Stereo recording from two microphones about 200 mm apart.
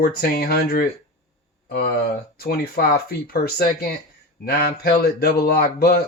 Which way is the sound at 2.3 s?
50° left (ahead or behind).